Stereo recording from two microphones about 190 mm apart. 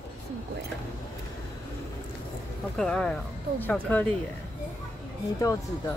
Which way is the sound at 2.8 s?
5° left (ahead or behind).